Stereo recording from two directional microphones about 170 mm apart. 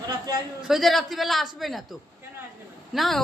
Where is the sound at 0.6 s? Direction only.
Centre (ahead or behind).